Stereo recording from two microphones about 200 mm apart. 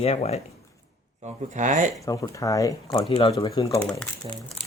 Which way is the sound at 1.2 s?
35° right (ahead or behind).